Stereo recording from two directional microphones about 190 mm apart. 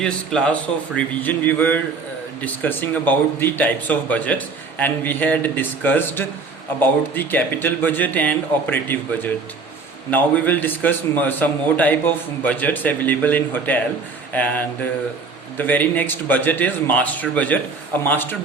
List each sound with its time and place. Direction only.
0.0 s speech: 5° left (ahead or behind)